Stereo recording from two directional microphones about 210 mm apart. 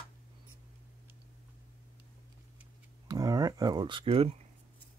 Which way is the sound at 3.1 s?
15° right (ahead or behind).